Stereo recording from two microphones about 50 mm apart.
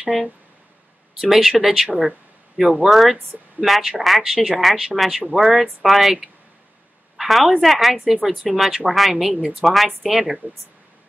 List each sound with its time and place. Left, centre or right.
0.0 s speech: centre
1.5 s speech: centre
2.9 s a woman's voice: centre
7.2 s a woman's voice: centre
8.0 s speech: centre
8.5 s a woman's voice: centre